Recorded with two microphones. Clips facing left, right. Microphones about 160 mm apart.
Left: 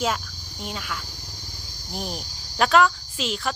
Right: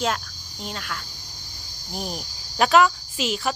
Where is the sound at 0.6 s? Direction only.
5° left (ahead or behind).